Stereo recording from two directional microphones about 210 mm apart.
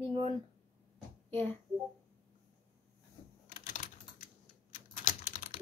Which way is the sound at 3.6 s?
40° left (ahead or behind).